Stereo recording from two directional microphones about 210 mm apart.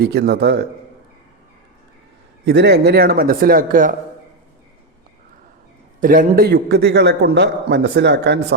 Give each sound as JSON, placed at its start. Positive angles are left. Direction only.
{"t": 0.0, "sound": "a man's voice", "side_deg": -50}
{"t": 2.4, "sound": "a man's voice", "side_deg": -55}
{"t": 6.0, "sound": "a man's voice", "side_deg": -40}